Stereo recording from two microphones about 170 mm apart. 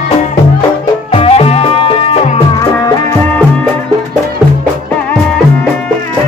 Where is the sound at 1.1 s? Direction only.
35° left (ahead or behind).